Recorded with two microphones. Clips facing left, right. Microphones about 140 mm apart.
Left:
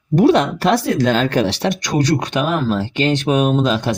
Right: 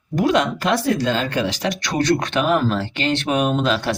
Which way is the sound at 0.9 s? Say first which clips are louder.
Left 5 dB; 75° left (ahead or behind).